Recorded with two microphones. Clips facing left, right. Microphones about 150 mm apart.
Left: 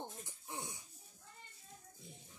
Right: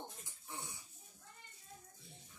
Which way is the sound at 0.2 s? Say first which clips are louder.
Left 3 dB; 15° left (ahead or behind).